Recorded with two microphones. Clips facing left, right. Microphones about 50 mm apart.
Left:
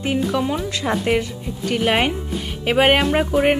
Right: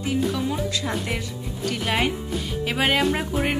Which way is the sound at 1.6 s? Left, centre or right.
Left.